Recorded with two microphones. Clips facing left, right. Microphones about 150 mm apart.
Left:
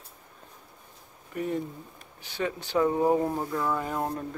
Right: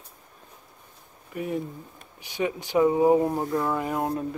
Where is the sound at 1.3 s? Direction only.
10° right (ahead or behind).